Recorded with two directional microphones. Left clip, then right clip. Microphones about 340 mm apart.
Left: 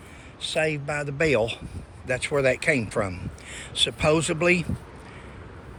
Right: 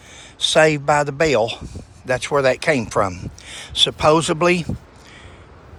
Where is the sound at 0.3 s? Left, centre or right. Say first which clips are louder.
Right 11 dB; centre.